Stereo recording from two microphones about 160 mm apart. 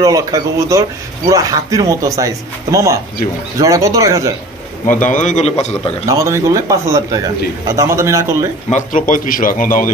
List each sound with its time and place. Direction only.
0.0 s speech: 20° right (ahead or behind)
4.8 s a man's voice: 55° left (ahead or behind)
6.0 s a man's voice: 20° right (ahead or behind)
8.7 s a man's voice: 55° left (ahead or behind)